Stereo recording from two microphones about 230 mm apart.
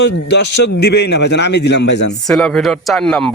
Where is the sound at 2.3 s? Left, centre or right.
Centre.